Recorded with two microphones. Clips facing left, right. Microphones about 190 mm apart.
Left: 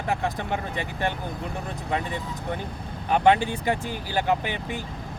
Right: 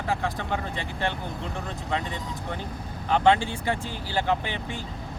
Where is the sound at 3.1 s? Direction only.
15° left (ahead or behind).